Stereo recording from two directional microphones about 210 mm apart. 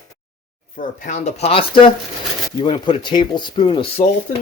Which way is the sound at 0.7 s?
35° left (ahead or behind).